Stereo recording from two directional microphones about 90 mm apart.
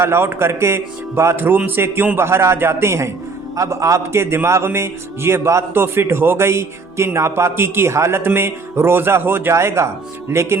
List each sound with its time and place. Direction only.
0.0 s a man's voice: 25° right (ahead or behind)